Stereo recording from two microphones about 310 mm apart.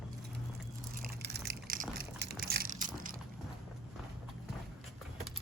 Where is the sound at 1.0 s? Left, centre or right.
Right.